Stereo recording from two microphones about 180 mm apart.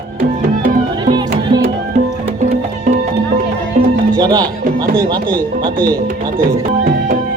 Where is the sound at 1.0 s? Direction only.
25° right (ahead or behind).